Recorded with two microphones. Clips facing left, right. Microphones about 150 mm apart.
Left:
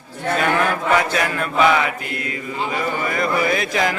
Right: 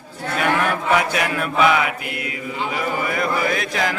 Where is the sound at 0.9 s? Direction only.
10° right (ahead or behind).